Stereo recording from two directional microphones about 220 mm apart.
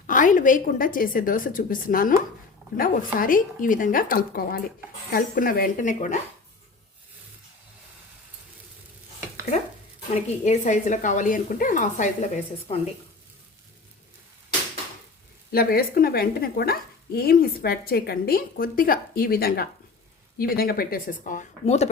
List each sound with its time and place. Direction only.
0.1 s a woman's voice: 35° left (ahead or behind)
10.2 s a woman's voice: 30° left (ahead or behind)
15.5 s a woman's voice: 45° left (ahead or behind)